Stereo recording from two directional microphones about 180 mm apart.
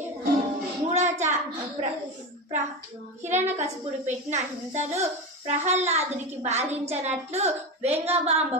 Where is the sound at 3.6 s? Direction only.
40° right (ahead or behind).